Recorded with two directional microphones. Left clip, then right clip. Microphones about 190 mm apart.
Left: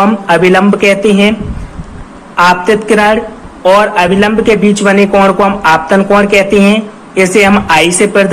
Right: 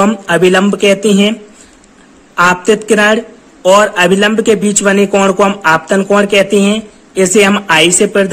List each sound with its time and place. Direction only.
0.0 s a man's voice: 50° right (ahead or behind)
2.3 s a man's voice: 45° right (ahead or behind)